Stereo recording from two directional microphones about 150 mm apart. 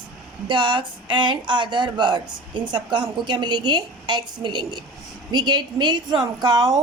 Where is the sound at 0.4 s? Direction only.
35° right (ahead or behind).